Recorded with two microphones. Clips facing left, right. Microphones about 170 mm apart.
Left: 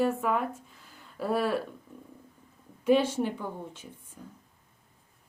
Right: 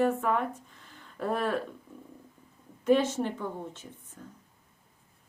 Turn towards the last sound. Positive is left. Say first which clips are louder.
# even
turn(degrees=10)  # may be behind; listen again after turning